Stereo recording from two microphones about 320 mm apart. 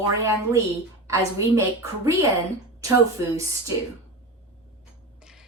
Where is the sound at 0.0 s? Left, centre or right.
Centre.